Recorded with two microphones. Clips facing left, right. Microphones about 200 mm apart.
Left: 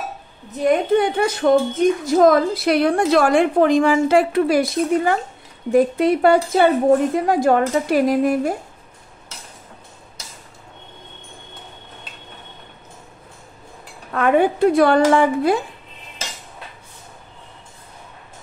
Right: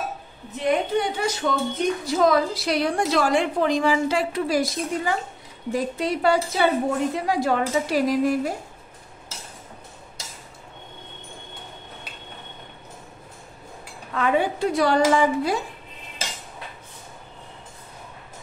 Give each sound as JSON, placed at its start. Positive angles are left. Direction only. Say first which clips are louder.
{"t": 0.9, "sound": "a woman's voice", "louder": "left 6 dB", "side_deg": 55}
{"t": 14.1, "sound": "a woman's voice", "louder": "left 6 dB", "side_deg": 55}